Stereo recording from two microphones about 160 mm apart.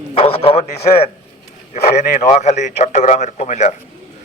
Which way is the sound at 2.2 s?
45° left (ahead or behind).